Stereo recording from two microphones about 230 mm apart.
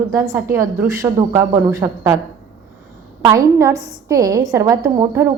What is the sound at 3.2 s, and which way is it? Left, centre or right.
A woman's voice, centre.